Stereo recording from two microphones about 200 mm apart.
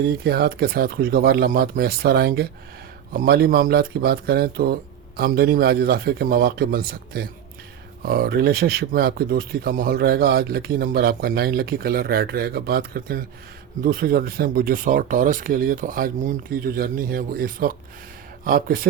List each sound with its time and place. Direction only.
0.3 s speech: 50° right (ahead or behind)